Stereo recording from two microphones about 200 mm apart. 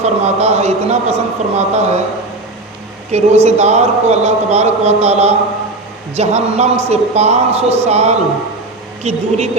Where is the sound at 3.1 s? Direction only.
35° right (ahead or behind).